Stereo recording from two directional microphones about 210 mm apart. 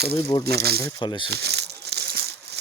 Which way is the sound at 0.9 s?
20° left (ahead or behind).